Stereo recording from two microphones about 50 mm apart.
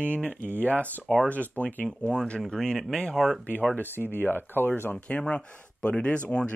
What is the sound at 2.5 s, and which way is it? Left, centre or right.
Speech, centre.